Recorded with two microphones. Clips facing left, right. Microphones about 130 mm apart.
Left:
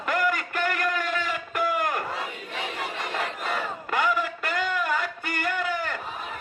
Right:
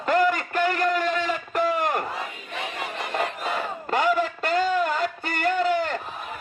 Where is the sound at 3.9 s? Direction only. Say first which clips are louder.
Right 4 dB; 30° right (ahead or behind).